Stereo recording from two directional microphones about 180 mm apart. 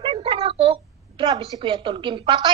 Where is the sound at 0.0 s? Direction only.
30° right (ahead or behind).